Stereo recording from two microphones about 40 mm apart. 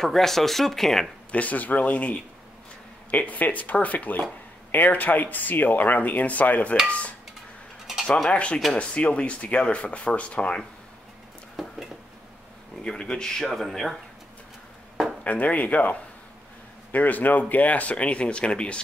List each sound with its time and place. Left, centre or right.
0.0 s speech: centre
1.3 s speech: left
7.8 s a sound: centre
8.3 s speech: left
11.6 s a sound: centre
12.8 s speech: left
13.5 s speech: centre
15.2 s speech: left